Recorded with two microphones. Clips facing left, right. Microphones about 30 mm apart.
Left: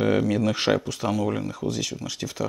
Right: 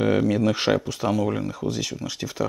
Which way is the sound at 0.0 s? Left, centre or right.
Centre.